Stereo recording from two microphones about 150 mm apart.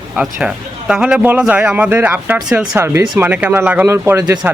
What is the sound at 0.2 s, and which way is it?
Speech, 5° right (ahead or behind).